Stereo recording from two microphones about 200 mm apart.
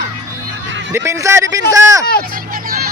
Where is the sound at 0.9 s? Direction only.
15° right (ahead or behind).